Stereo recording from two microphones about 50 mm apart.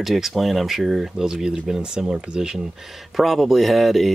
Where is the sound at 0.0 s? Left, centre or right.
Centre.